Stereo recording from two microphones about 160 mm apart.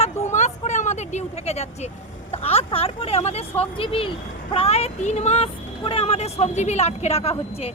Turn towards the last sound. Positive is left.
turn(degrees=40)  # may be behind; listen again after turning